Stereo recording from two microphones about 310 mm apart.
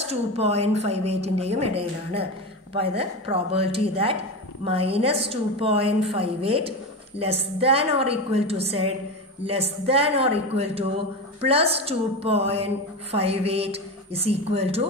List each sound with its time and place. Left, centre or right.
0.0 s a woman's voice: centre